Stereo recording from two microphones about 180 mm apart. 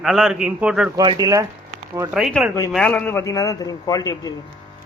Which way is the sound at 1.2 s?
20° right (ahead or behind).